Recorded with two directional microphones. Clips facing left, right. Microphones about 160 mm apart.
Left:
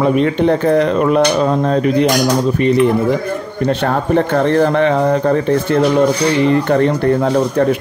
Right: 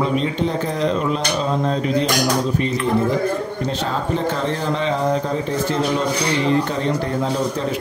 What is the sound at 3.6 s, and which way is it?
Speech, 60° left (ahead or behind).